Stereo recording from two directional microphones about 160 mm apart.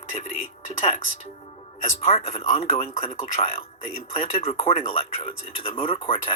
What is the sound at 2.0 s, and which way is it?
Speech, 40° left (ahead or behind).